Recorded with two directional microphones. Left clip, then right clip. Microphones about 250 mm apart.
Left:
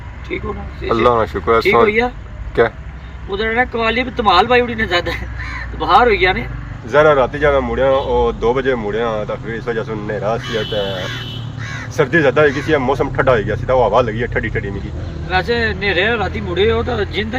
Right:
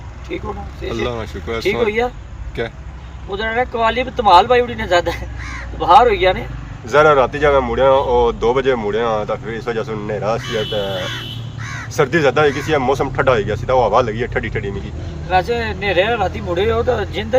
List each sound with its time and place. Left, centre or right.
0.3 s speech: centre
1.0 s speech: centre
3.8 s speech: centre
10.4 s speech: right
11.6 s crow: right
11.9 s speech: centre